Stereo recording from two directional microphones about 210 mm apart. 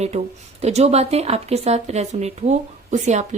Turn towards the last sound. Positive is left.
turn(degrees=-35)  # may be behind; listen again after turning